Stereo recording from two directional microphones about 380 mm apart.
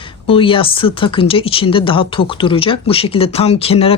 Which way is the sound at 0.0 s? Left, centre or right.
Centre.